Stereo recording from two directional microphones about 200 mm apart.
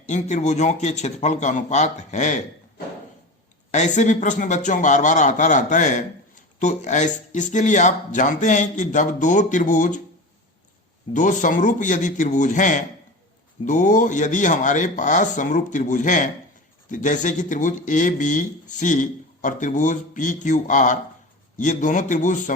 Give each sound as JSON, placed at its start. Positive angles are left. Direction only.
{"t": 0.1, "sound": "speech", "side_deg": 35}
{"t": 11.1, "sound": "speech", "side_deg": 40}